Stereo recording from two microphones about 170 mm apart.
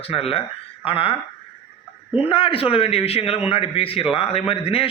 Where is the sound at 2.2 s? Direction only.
30° left (ahead or behind).